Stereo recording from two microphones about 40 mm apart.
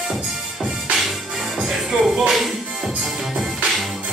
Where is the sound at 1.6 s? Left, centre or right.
Centre.